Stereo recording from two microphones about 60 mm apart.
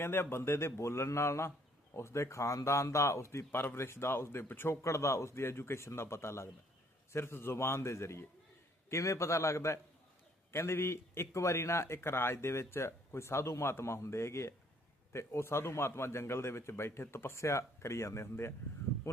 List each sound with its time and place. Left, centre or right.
0.0 s speech: left
3.5 s speech: left
4.7 s a man's voice: left
19.1 s a sound: left